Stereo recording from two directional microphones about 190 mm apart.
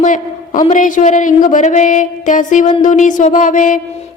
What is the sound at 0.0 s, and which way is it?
A man's voice, 45° left (ahead or behind).